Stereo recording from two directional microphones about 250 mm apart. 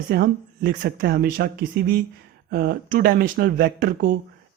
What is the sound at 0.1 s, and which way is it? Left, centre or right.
Speech, right.